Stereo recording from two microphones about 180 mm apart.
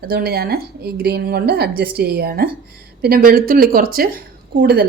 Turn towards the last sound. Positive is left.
turn(degrees=-65)  # may be behind; listen again after turning